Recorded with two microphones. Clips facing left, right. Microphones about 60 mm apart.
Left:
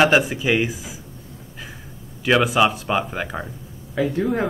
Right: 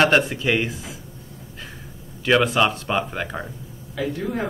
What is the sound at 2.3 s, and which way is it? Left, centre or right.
Speech, centre.